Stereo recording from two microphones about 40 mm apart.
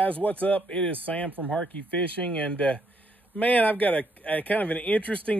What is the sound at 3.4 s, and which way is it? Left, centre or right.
Speech, left.